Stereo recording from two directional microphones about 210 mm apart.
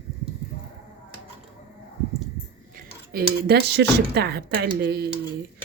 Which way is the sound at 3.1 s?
50° right (ahead or behind).